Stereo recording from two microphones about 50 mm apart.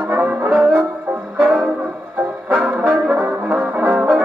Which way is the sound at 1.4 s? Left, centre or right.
Right.